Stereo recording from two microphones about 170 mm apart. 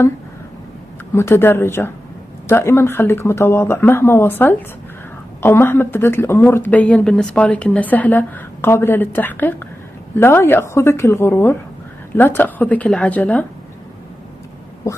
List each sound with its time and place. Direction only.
1.1 s speech: 15° left (ahead or behind)